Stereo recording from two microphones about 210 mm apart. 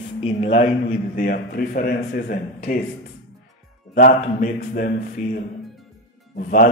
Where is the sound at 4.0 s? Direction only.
40° left (ahead or behind).